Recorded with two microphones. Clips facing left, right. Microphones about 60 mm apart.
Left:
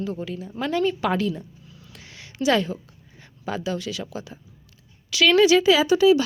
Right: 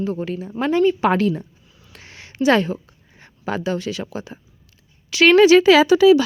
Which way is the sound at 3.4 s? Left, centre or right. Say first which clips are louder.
Right 4 dB; right.